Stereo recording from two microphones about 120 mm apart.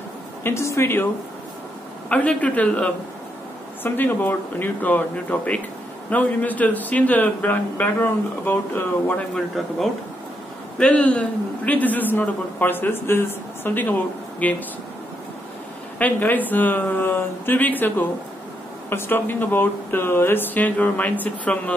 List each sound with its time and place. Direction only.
0.4 s a woman's voice: 20° left (ahead or behind)
2.0 s a man's voice: 10° left (ahead or behind)
10.8 s a man's voice: 10° left (ahead or behind)
16.0 s a man's voice: 15° left (ahead or behind)